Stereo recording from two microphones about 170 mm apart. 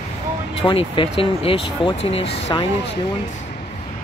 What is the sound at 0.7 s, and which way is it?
Speech, 30° left (ahead or behind).